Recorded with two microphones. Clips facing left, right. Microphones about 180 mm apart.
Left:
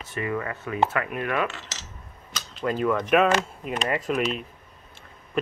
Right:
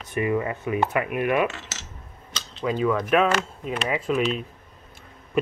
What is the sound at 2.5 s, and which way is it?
Speech, centre (ahead or behind).